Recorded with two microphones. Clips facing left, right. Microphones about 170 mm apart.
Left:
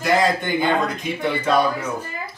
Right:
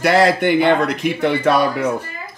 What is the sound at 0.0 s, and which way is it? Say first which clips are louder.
Speech: right 5 dB; 75° right (ahead or behind).